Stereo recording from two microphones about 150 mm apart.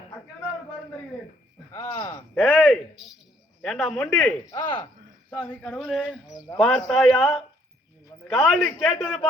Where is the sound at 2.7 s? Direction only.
Centre (ahead or behind).